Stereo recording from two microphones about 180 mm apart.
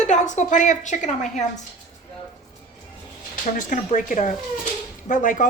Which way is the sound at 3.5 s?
45° left (ahead or behind).